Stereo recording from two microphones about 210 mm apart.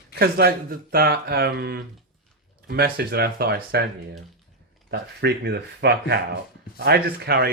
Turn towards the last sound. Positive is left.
turn(degrees=-50)  # may be behind; listen again after turning